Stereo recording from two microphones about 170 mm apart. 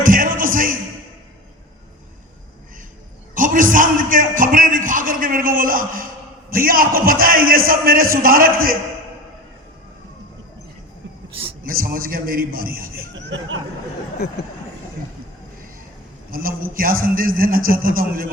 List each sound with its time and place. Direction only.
0.0 s music: 55° right (ahead or behind)
3.3 s a sound: 50° right (ahead or behind)
6.5 s a man's voice: 60° right (ahead or behind)
11.6 s a man's voice: 60° right (ahead or behind); by 13.6 s 90° right
16.3 s a man's voice: 60° right (ahead or behind)